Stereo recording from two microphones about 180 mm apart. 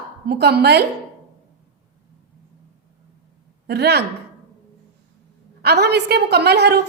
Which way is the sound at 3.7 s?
65° right (ahead or behind).